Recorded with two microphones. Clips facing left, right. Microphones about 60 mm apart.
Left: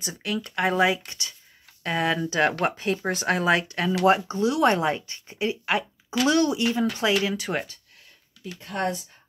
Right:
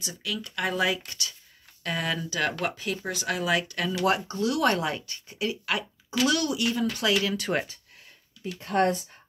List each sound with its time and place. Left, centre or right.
0.0 s speech: left
7.3 s speech: centre
8.6 s speech: right